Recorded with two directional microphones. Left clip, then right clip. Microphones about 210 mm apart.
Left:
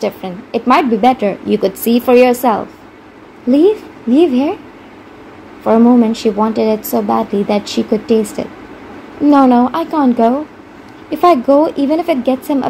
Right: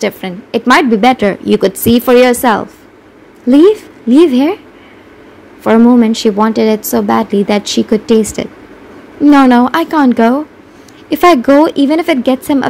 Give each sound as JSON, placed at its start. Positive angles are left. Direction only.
{"t": 0.0, "sound": "speech", "side_deg": -50}
{"t": 5.6, "sound": "speech", "side_deg": -55}